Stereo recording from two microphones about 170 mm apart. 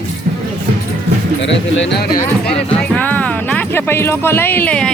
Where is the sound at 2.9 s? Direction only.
10° left (ahead or behind).